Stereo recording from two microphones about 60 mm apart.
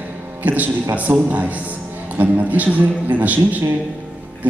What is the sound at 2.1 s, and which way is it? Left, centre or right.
A man's voice, right.